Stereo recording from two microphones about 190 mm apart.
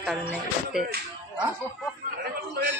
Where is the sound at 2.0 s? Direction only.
55° right (ahead or behind).